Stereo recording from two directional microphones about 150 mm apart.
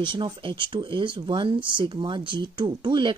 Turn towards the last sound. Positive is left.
turn(degrees=-30)  # may be behind; listen again after turning